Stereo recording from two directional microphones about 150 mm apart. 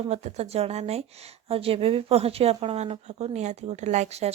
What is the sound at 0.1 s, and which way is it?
Speech, 45° right (ahead or behind).